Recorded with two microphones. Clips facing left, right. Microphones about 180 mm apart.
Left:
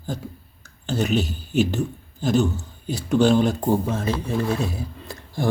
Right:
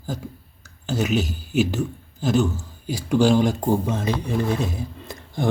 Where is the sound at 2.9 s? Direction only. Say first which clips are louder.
Even; 10° right (ahead or behind).